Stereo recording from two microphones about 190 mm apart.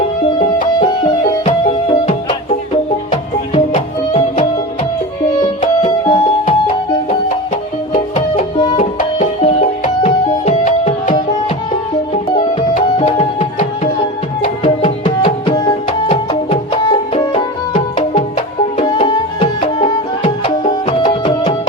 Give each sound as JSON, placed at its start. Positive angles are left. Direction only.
{"t": 1.5, "sound": "music", "side_deg": 35}
{"t": 8.5, "sound": "music", "side_deg": 25}
{"t": 9.1, "sound": "music", "side_deg": 35}